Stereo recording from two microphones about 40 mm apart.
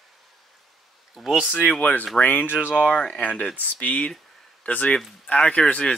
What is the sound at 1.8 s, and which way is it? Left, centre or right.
Speech, left.